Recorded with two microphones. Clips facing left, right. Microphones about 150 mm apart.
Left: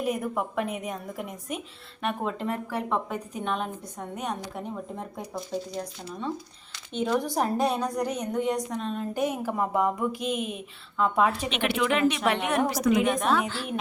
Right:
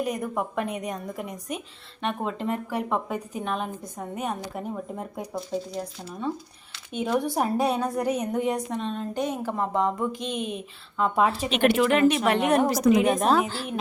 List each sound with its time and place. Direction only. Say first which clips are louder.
0.0 s a woman's voice: even; centre (ahead or behind)
8.8 s a woman's voice: even; 5° left (ahead or behind)
11.5 s a woman's voice: right 5 dB; 45° right (ahead or behind)